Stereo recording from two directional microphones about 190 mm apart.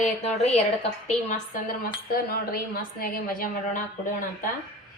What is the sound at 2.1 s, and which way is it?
A woman's voice, 55° left (ahead or behind).